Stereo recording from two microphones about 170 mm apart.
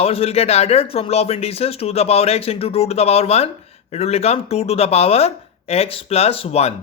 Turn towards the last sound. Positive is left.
turn(degrees=35)  # may be behind; listen again after turning